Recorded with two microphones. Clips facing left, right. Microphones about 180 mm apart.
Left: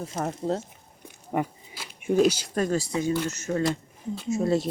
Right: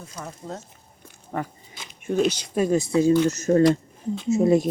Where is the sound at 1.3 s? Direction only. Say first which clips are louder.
Left 2 dB; 10° left (ahead or behind).